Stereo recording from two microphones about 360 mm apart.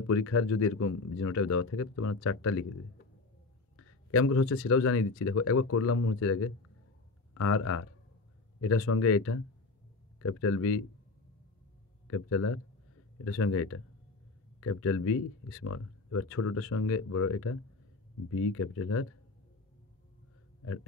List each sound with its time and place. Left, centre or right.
0.0 s speech: left
3.7 s speech: left
12.1 s speech: left